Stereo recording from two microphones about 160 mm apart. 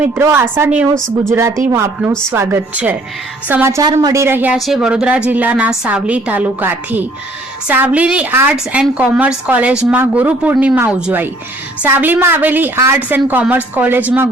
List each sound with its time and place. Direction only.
0.0 s a woman's voice: 15° right (ahead or behind)
4.5 s a woman's voice: centre (ahead or behind)